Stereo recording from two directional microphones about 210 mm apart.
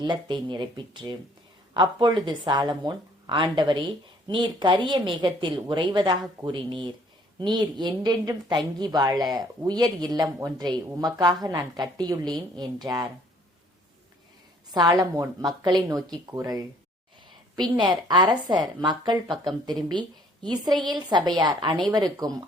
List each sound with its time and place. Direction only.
0.0 s a woman's voice: 20° right (ahead or behind)
14.7 s a woman's voice: 20° right (ahead or behind)